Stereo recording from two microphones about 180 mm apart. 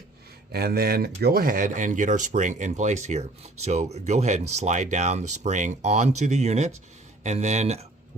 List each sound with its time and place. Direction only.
0.5 s speech: 60° right (ahead or behind); by 7.9 s 40° right (ahead or behind)